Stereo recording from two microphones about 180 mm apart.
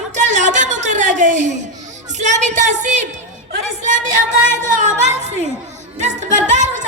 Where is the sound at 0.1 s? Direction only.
45° right (ahead or behind).